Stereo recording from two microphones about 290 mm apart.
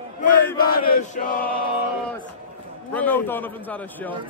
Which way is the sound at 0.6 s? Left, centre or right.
Left.